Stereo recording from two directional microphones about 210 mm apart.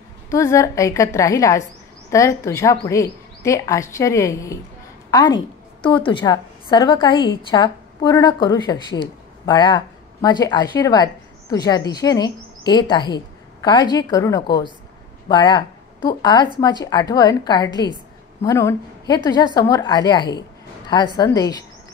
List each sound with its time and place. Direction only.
0.3 s a woman's voice: 15° left (ahead or behind)